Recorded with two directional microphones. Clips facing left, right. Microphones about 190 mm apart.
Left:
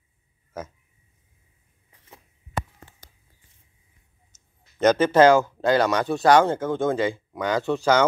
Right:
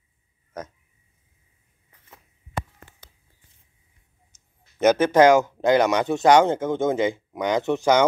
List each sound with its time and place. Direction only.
0.5 s speech: 5° left (ahead or behind)
4.3 s speech: 10° right (ahead or behind)